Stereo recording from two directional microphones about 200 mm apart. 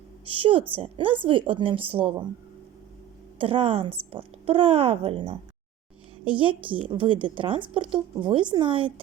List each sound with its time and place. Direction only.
0.3 s a woman's voice: 25° right (ahead or behind)
3.3 s a woman's voice: 30° right (ahead or behind)